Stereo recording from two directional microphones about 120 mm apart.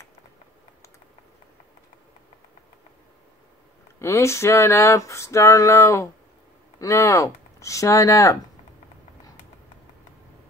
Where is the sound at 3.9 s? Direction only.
25° left (ahead or behind).